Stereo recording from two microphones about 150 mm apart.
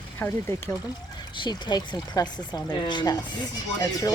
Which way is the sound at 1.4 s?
30° left (ahead or behind).